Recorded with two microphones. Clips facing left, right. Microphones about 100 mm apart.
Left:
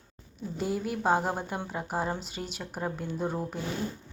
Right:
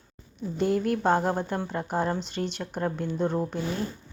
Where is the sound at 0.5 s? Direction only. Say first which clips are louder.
Right 6 dB; 5° left (ahead or behind).